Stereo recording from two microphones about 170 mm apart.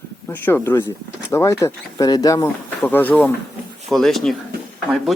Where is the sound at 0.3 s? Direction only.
10° left (ahead or behind).